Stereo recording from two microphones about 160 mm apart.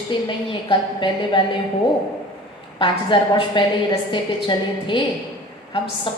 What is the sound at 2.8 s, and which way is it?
A woman's voice, 30° left (ahead or behind).